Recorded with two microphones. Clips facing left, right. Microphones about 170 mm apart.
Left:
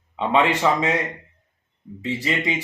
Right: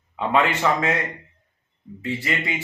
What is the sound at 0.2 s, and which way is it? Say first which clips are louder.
Speech: left 1 dB; 20° left (ahead or behind).